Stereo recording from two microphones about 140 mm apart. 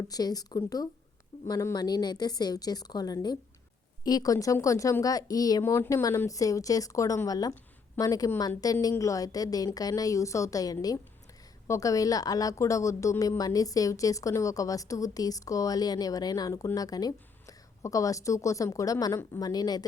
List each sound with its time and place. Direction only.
0.1 s a woman's voice: 25° left (ahead or behind)